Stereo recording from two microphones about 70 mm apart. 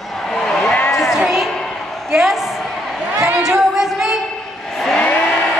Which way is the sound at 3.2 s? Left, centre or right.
Centre.